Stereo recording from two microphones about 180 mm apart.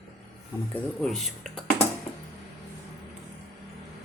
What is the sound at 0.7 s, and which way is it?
Speech, 5° left (ahead or behind).